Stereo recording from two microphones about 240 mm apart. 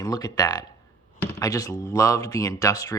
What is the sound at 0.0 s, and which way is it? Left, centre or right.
Speech, centre.